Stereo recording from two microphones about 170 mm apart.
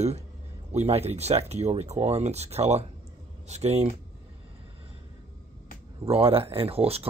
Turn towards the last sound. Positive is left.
turn(degrees=-35)  # may be behind; listen again after turning